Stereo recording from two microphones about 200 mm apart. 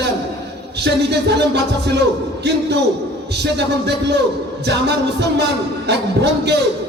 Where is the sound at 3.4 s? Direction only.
55° right (ahead or behind).